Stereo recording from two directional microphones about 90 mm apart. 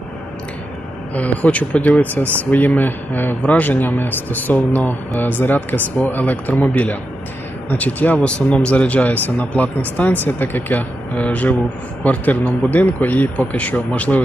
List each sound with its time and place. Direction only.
1.1 s speech: 15° left (ahead or behind)